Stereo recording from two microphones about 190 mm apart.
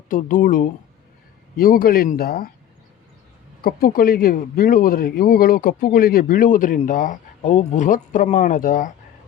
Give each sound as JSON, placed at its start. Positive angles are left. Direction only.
{"t": 0.1, "sound": "speech", "side_deg": 45}
{"t": 3.6, "sound": "speech", "side_deg": 50}